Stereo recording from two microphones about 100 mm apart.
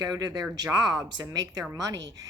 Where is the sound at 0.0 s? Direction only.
35° right (ahead or behind).